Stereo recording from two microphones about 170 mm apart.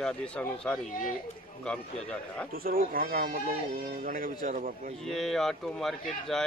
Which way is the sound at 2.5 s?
60° right (ahead or behind).